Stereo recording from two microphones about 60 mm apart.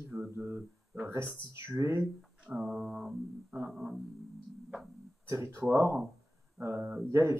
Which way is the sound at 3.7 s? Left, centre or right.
Centre.